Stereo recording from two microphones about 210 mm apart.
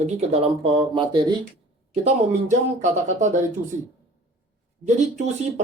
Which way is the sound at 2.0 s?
35° right (ahead or behind).